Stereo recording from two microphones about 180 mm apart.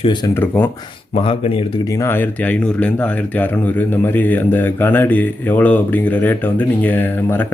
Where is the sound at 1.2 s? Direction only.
30° left (ahead or behind).